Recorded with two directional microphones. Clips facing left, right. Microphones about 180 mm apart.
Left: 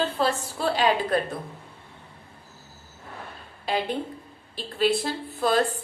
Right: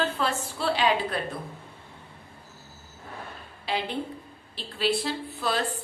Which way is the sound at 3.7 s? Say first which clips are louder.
Left 3 dB; 45° left (ahead or behind).